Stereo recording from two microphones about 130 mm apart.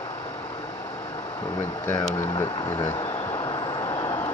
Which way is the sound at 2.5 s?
40° left (ahead or behind).